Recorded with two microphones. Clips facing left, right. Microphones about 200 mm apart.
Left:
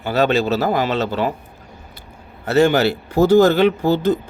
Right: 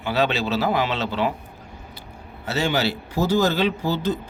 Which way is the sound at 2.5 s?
55° left (ahead or behind).